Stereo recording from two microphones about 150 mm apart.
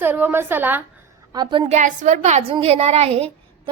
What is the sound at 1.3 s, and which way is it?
Speech, 30° right (ahead or behind).